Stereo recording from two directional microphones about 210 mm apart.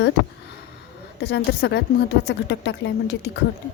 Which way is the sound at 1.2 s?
55° left (ahead or behind).